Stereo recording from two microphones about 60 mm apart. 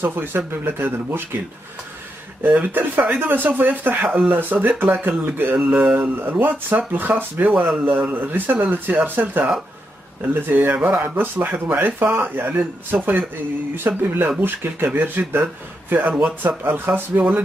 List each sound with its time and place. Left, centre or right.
0.0 s speech: right
2.4 s speech: right
5.6 s speech: right